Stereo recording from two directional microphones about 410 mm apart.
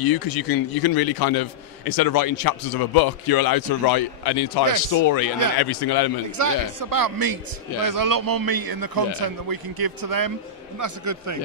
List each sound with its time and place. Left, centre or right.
0.0 s a man's voice: left
5.0 s a man's voice: left
5.6 s a man's voice: left
6.3 s a man's voice: right